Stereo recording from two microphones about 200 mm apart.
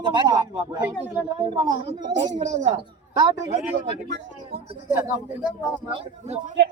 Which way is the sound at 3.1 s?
20° right (ahead or behind).